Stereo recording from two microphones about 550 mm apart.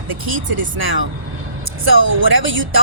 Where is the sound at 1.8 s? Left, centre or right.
Right.